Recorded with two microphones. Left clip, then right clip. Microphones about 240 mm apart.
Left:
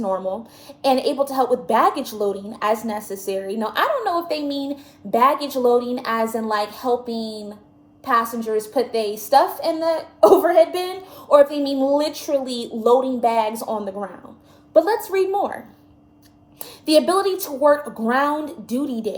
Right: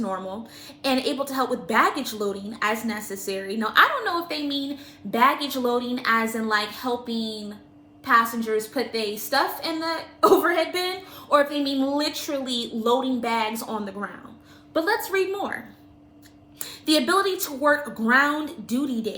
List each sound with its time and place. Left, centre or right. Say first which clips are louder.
0.8 s a woman's voice: left 6 dB; centre
16.6 s a woman's voice: left 5 dB; centre